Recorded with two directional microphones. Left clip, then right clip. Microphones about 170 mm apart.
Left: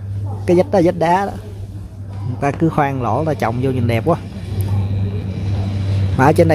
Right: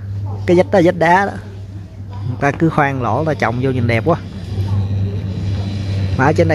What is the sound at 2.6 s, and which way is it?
Speech, 5° left (ahead or behind).